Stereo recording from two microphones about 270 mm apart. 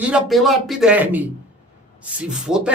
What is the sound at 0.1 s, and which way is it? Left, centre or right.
Speech, centre.